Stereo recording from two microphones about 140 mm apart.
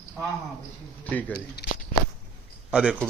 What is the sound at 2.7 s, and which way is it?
Speech, 10° right (ahead or behind).